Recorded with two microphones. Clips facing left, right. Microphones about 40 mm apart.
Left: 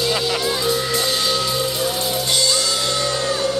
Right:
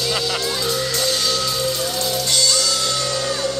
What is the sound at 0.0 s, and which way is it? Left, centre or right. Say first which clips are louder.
Music: left 2 dB; centre.